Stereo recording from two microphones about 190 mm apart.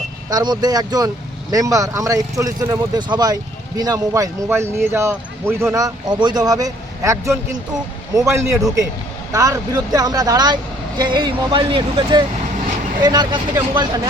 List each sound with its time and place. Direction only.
0.3 s speech: 20° right (ahead or behind)